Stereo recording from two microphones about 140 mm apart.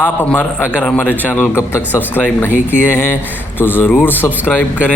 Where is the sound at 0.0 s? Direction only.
10° left (ahead or behind).